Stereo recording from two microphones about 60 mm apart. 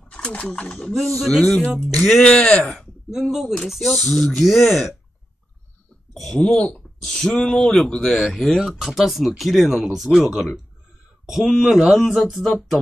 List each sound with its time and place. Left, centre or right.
0.1 s speech: centre
0.7 s speech: centre
2.6 s a sound: centre
3.2 s speech: centre
6.3 s speech: centre
12.1 s speech: centre